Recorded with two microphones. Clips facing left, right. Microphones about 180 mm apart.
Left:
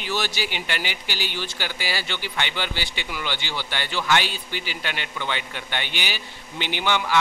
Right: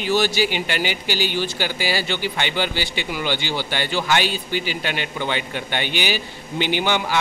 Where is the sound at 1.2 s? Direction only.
40° right (ahead or behind).